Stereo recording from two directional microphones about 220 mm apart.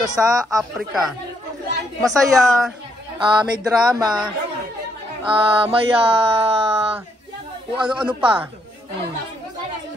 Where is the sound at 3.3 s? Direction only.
20° right (ahead or behind).